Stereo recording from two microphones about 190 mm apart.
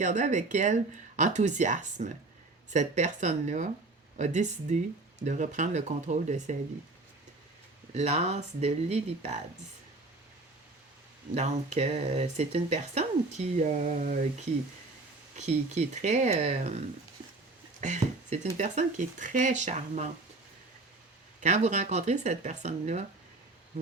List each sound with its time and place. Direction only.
0.0 s speech: 40° right (ahead or behind)
7.9 s speech: 35° right (ahead or behind)
11.3 s speech: 35° right (ahead or behind)
17.7 s speech: 40° right (ahead or behind)
21.4 s speech: 35° right (ahead or behind)